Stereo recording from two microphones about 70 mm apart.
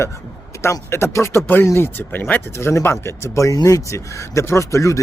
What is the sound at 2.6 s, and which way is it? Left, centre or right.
Speech, left.